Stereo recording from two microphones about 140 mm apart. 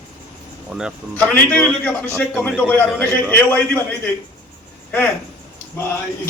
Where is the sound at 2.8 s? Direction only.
5° left (ahead or behind).